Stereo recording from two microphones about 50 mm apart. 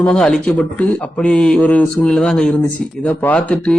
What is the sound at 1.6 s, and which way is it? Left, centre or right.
Mantra, left.